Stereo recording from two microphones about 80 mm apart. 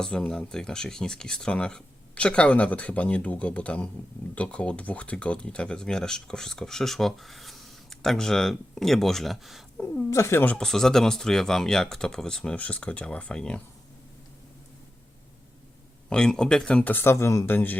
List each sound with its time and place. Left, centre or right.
0.0 s speech: centre
10.1 s speech: left
10.4 s speech: centre
10.7 s speech: centre
16.0 s speech: centre